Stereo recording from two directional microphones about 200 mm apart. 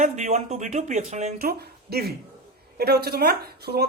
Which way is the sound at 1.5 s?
50° right (ahead or behind).